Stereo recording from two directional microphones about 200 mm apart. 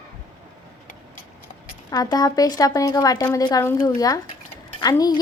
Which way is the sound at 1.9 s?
20° left (ahead or behind).